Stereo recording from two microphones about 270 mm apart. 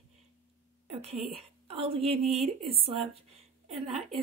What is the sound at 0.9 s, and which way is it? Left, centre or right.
A woman's voice, right.